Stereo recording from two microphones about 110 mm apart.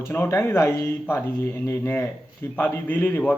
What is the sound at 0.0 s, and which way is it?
Speech, 20° left (ahead or behind).